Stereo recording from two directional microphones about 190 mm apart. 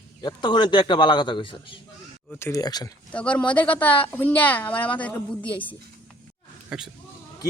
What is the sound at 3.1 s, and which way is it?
A woman's voice, 5° left (ahead or behind).